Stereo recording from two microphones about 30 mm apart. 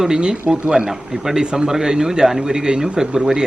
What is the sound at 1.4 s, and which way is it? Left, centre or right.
Speech, right.